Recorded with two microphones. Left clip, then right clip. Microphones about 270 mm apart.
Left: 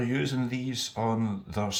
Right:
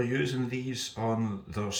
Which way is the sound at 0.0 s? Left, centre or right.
Centre.